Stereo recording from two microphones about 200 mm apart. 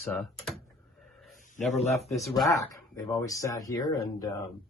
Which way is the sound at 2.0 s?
15° left (ahead or behind).